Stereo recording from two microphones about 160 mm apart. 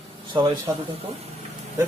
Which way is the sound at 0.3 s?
30° right (ahead or behind).